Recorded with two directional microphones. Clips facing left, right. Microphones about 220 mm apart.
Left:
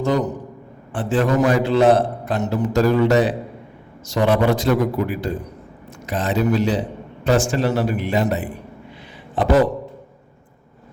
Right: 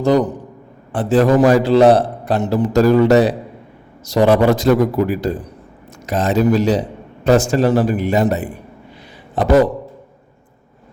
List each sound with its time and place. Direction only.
0.0 s a man's voice: 35° right (ahead or behind)